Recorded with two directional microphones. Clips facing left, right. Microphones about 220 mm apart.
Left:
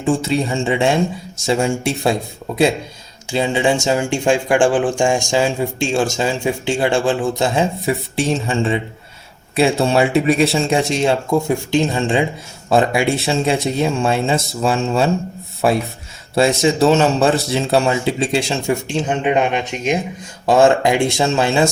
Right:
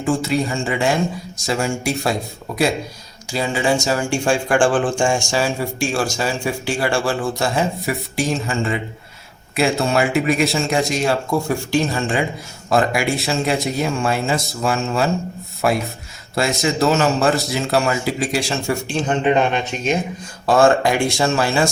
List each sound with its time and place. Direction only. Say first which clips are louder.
0.0 s speech: left 2 dB; 25° left (ahead or behind)
3.3 s speech: left 3 dB; 25° left (ahead or behind)
19.0 s speech: right 1 dB; 10° left (ahead or behind)